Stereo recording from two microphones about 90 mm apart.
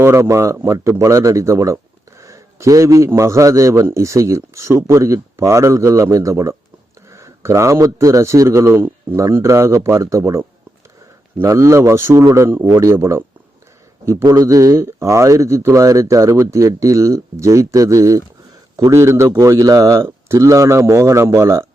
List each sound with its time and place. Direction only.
0.0 s speech: 30° right (ahead or behind)
11.4 s a man's voice: 35° right (ahead or behind)